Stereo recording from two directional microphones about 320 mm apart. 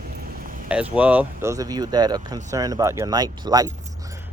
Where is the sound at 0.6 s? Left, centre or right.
Centre.